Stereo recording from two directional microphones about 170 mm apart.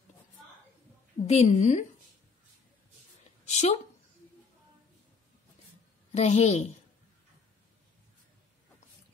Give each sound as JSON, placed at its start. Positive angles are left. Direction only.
{"t": 1.2, "sound": "a woman's voice", "side_deg": 40}
{"t": 3.4, "sound": "a sound", "side_deg": 40}
{"t": 6.1, "sound": "a woman's voice", "side_deg": 40}